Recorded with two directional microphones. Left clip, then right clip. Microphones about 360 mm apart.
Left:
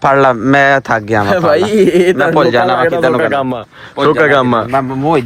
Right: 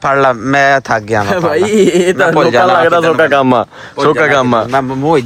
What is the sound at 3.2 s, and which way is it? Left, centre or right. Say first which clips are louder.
Speech: right 5 dB; right.